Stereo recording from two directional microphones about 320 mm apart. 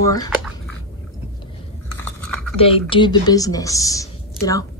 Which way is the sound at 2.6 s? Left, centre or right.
Centre.